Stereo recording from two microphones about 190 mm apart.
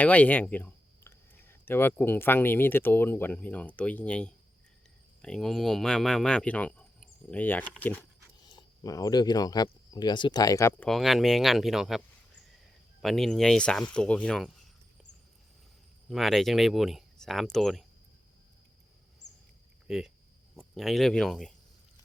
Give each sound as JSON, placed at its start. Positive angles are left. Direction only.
{"t": 0.0, "sound": "speech", "side_deg": 10}
{"t": 8.4, "sound": "speech", "side_deg": 25}
{"t": 10.8, "sound": "speech", "side_deg": 0}
{"t": 16.0, "sound": "speech", "side_deg": 0}
{"t": 19.9, "sound": "speech", "side_deg": -5}